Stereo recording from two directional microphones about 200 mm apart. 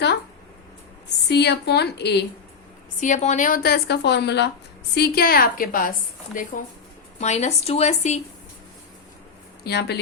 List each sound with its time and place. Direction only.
1.3 s speech: 55° left (ahead or behind)
3.0 s a woman's voice: 35° left (ahead or behind)
9.6 s speech: 55° left (ahead or behind)